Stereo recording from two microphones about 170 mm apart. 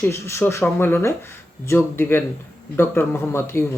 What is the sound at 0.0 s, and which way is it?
Speech, 15° left (ahead or behind).